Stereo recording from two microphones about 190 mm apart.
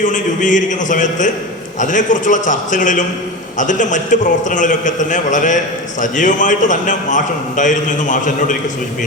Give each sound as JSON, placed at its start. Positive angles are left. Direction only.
{"t": 0.0, "sound": "a man's voice", "side_deg": 40}